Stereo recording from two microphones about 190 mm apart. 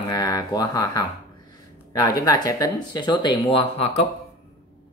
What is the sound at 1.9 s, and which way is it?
Speech, 20° left (ahead or behind).